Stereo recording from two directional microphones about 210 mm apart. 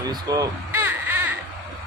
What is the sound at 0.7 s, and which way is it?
Baby cry, 10° right (ahead or behind).